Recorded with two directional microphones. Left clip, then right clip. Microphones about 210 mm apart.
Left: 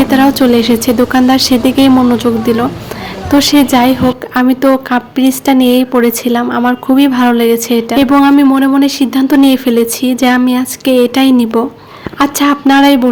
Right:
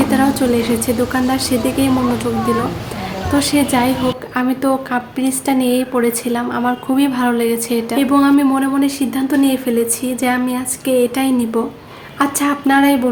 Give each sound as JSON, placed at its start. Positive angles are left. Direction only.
{"t": 0.1, "sound": "speech", "side_deg": 40}
{"t": 3.3, "sound": "a woman's voice", "side_deg": 40}